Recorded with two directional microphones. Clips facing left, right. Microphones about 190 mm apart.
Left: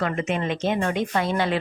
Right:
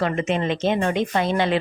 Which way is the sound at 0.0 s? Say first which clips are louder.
Right 3 dB; 25° right (ahead or behind).